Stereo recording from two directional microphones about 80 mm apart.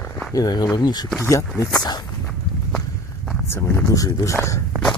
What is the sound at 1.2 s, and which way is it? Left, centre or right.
Speech, left.